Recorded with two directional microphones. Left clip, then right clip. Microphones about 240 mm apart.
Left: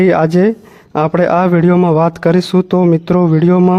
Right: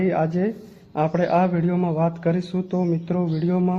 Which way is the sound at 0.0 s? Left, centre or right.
Left.